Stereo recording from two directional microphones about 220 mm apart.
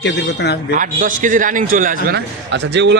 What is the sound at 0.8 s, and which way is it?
A man's voice, 35° right (ahead or behind).